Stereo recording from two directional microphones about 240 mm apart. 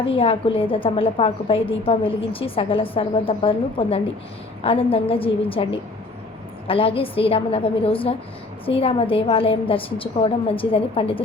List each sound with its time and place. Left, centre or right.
0.0 s a woman's voice: left
6.7 s a woman's voice: left